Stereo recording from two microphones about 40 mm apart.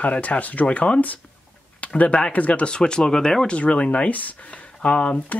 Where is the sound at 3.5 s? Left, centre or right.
Left.